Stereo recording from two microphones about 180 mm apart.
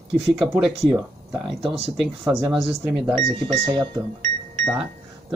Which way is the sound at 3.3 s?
30° right (ahead or behind).